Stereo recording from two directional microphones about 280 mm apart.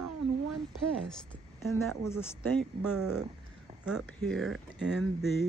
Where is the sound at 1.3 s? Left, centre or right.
Centre.